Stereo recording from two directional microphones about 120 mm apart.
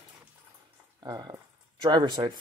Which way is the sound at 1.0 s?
35° right (ahead or behind).